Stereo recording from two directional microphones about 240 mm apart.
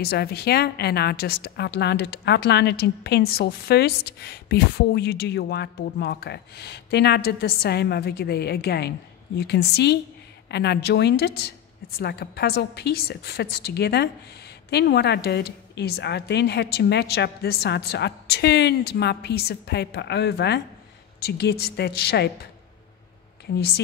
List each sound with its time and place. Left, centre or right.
0.0 s a woman's voice: left